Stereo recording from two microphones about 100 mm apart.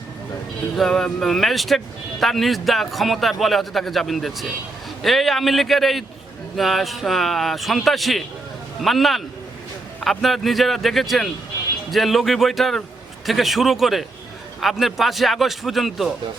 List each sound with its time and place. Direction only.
0.8 s a man's voice: 5° left (ahead or behind)